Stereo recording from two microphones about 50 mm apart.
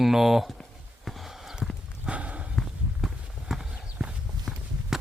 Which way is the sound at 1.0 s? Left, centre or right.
Centre.